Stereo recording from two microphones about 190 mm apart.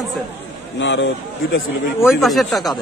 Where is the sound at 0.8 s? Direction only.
70° left (ahead or behind).